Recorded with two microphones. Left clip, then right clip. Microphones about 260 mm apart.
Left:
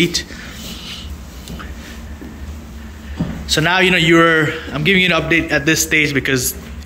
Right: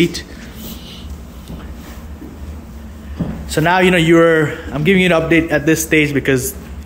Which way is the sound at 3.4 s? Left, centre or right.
Centre.